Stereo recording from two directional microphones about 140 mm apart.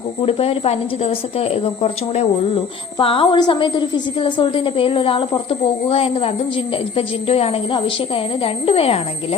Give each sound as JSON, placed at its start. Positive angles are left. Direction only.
{"t": 0.2, "sound": "a woman's voice", "side_deg": 45}